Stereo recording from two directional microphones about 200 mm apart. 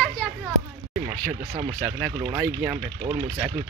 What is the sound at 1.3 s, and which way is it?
Speech, 30° right (ahead or behind).